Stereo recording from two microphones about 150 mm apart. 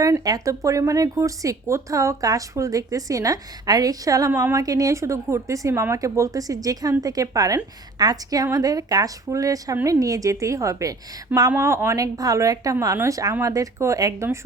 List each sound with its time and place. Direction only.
0.0 s speech: 25° right (ahead or behind)
4.3 s a woman's voice: 10° right (ahead or behind)
4.5 s speech: 25° right (ahead or behind)